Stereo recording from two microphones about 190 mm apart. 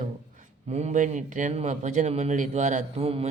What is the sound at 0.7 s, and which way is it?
A man's voice, 35° right (ahead or behind).